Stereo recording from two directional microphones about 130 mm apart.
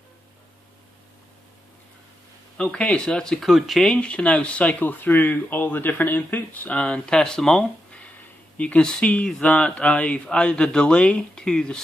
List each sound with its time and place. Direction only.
2.5 s speech: 10° left (ahead or behind)